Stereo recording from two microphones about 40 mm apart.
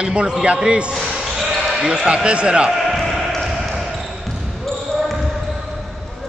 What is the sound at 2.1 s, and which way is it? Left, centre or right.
Speech, right.